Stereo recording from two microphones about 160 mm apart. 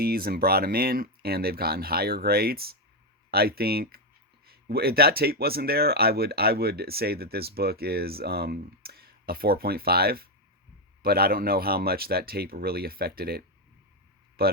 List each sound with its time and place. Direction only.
0.0 s speech: 70° right (ahead or behind)